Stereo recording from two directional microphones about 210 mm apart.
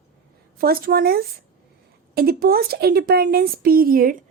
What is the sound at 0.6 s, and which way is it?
A woman's voice, 45° right (ahead or behind).